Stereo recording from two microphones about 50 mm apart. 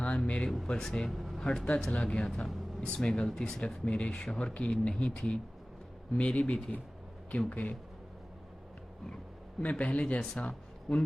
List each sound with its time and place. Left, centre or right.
0.0 s a sound: left
0.9 s speech: centre
1.4 s speech: centre; by 7.8 s left
9.6 s speech: left
10.2 s speech: centre